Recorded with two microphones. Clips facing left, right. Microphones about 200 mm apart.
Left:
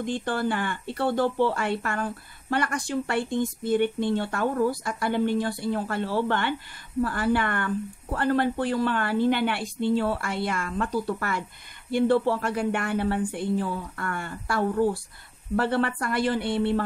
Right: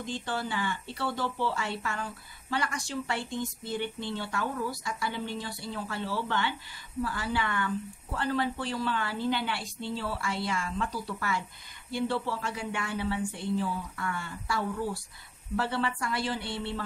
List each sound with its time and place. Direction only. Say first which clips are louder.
0.0 s speech: left 7 dB; 55° left (ahead or behind)